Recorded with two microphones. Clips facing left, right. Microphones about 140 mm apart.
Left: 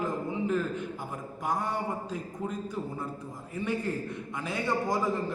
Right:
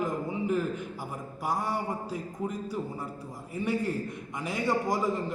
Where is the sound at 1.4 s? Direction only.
10° right (ahead or behind).